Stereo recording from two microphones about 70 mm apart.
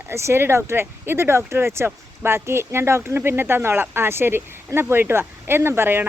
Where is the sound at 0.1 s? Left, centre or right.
Right.